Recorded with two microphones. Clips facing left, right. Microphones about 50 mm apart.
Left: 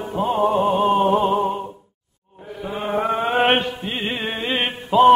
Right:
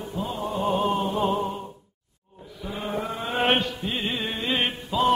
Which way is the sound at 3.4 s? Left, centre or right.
Left.